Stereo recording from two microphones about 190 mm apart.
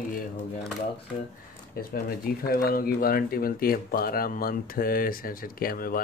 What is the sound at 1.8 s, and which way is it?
Speech, 50° left (ahead or behind).